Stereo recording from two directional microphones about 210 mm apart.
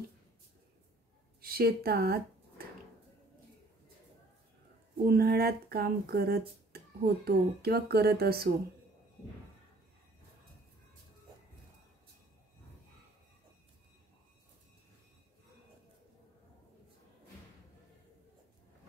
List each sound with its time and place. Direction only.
1.4 s speech: 45° right (ahead or behind)
5.0 s speech: 45° right (ahead or behind)